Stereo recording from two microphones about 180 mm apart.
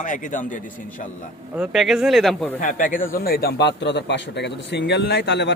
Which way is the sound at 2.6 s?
45° left (ahead or behind).